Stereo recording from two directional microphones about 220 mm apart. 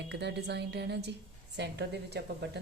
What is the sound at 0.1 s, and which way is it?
A woman's voice, 50° right (ahead or behind).